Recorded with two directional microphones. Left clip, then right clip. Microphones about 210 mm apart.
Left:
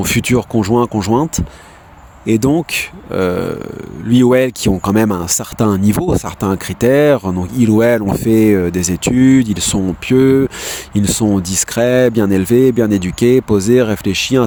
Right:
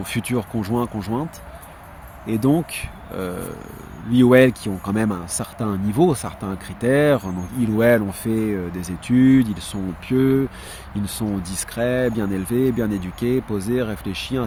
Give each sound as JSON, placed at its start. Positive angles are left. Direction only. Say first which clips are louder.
{"t": 0.0, "sound": "speech", "louder": "left 10 dB", "side_deg": 50}